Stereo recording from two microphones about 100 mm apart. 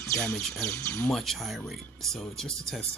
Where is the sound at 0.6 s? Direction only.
20° left (ahead or behind).